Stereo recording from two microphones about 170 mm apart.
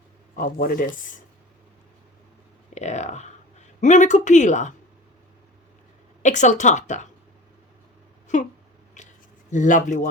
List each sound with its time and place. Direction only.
0.3 s speech: 55° left (ahead or behind)
2.7 s speech: 40° left (ahead or behind)
6.2 s speech: 45° left (ahead or behind)
9.0 s a sound: 45° left (ahead or behind)
9.5 s speech: 50° left (ahead or behind)